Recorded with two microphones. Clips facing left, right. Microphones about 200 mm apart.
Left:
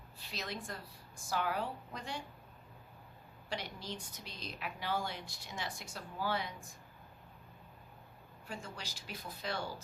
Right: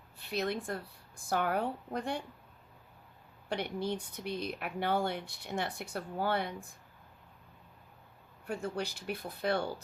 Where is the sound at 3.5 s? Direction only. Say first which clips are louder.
Right 8 dB; 60° right (ahead or behind).